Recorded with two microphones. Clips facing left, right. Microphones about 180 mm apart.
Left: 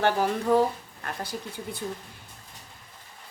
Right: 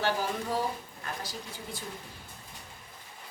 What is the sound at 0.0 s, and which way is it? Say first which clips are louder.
A woman's voice: left 6 dB; 60° left (ahead or behind).